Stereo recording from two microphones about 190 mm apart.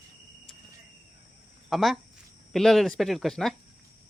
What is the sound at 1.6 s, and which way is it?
Speech, centre (ahead or behind).